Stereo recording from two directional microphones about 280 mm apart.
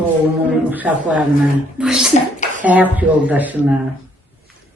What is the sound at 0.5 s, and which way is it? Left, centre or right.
A man's voice, centre.